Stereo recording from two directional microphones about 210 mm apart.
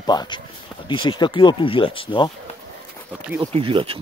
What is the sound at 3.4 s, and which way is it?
Speech, 25° right (ahead or behind).